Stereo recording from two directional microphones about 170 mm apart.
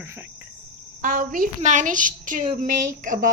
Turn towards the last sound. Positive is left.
turn(degrees=-50)  # may be behind; listen again after turning